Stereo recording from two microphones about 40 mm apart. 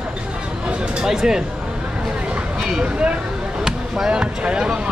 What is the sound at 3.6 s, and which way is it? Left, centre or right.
Basketball bounce, centre.